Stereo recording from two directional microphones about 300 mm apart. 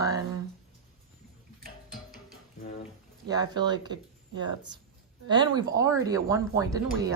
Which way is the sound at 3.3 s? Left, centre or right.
Centre.